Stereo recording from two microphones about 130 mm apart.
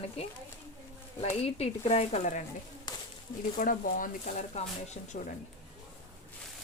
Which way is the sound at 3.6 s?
90° left.